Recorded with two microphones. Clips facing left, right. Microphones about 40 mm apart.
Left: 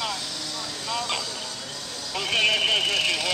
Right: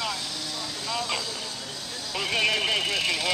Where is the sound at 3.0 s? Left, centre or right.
Centre.